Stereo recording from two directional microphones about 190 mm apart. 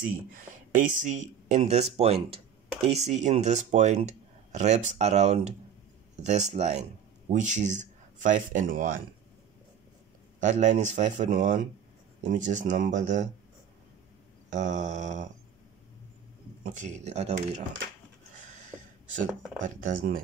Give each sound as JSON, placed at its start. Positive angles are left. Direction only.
{"t": 0.0, "sound": "speech", "side_deg": -45}
{"t": 10.4, "sound": "speech", "side_deg": -40}
{"t": 14.5, "sound": "speech", "side_deg": -40}
{"t": 16.8, "sound": "speech", "side_deg": -35}
{"t": 18.3, "sound": "a sound", "side_deg": -40}
{"t": 19.6, "sound": "speech", "side_deg": -45}